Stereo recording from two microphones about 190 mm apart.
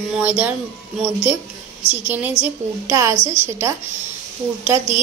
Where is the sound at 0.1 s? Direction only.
10° right (ahead or behind).